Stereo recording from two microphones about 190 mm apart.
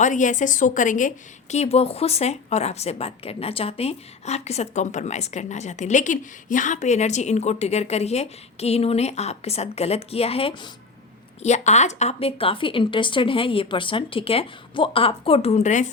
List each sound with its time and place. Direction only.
0.0 s a woman's voice: 40° left (ahead or behind)